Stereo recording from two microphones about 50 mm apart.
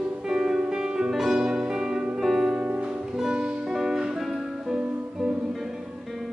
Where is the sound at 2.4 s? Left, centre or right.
Centre.